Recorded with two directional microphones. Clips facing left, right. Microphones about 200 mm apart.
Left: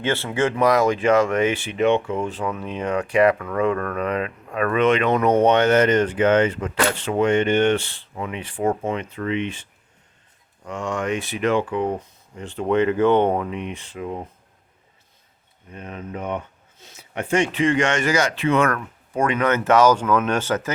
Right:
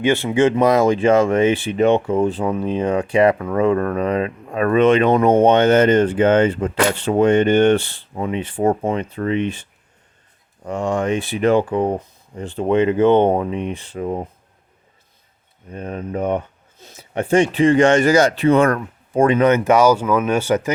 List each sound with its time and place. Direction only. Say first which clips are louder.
0.0 s speech: right 6 dB; 15° right (ahead or behind); by 9.6 s 40° right (ahead or behind)
10.7 s speech: right 5 dB; 35° right (ahead or behind)
12.6 s speech: right 3 dB; 20° right (ahead or behind); by 14.3 s 40° right (ahead or behind)
15.7 s speech: right 7 dB; 40° right (ahead or behind)
19.5 s speech: right 3 dB; 15° right (ahead or behind)